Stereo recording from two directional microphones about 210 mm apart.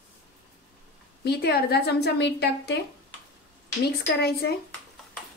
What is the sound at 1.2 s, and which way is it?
A woman's voice, 50° left (ahead or behind).